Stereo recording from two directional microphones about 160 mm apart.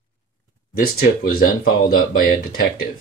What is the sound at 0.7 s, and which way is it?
Speech, 70° left (ahead or behind).